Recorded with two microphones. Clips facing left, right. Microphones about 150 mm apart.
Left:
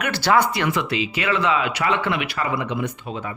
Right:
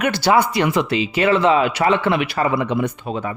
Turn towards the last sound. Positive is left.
turn(degrees=-35)  # may be behind; listen again after turning